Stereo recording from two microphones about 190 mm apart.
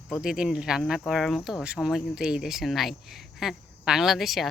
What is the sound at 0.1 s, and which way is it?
Speech, 5° right (ahead or behind).